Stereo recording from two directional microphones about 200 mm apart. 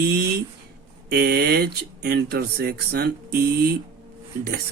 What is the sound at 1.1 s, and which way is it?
Speech, 50° right (ahead or behind).